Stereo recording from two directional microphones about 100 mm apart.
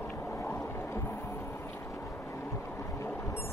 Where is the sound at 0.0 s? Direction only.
10° left (ahead or behind).